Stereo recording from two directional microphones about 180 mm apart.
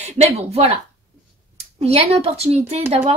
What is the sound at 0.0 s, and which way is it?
Speech, 35° right (ahead or behind).